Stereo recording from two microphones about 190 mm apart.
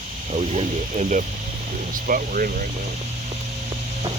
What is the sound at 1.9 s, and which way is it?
Speech, 45° right (ahead or behind).